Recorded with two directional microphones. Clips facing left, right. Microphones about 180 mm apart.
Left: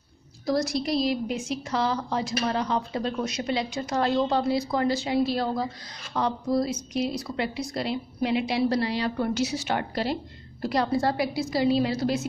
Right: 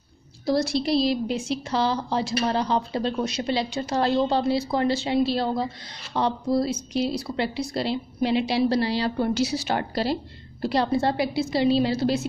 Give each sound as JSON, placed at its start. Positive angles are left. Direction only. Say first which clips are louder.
{"t": 0.5, "sound": "a woman's voice", "louder": "right 3 dB", "side_deg": -30}